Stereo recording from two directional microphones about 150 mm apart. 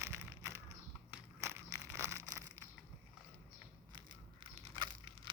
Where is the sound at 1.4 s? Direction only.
20° right (ahead or behind).